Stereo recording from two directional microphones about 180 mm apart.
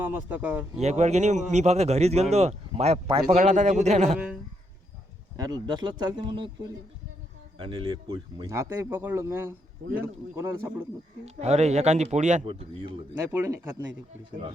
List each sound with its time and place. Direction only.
0.0 s a man's voice: 10° right (ahead or behind)
0.8 s a man's voice: 40° right (ahead or behind)
5.4 s speech: 25° right (ahead or behind)
7.7 s a man's voice: 30° right (ahead or behind)
8.4 s a man's voice: 15° right (ahead or behind)
11.3 s a man's voice: 40° right (ahead or behind)
12.5 s speech: 30° right (ahead or behind)
13.3 s a man's voice: 15° right (ahead or behind)